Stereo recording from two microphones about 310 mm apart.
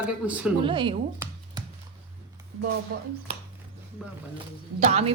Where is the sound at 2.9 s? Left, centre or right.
Right.